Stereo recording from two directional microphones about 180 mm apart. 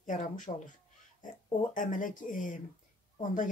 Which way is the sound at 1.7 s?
45° left (ahead or behind).